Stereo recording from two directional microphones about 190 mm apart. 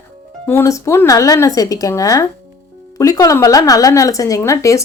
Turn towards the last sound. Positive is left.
turn(degrees=15)  # may be behind; listen again after turning